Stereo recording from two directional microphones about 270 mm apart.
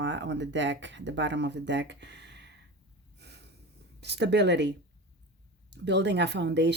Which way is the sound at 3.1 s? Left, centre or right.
Right.